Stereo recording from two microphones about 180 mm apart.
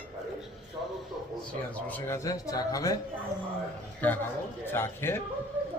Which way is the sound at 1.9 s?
15° left (ahead or behind).